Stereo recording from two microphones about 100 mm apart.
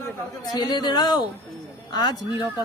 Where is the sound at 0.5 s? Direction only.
45° left (ahead or behind).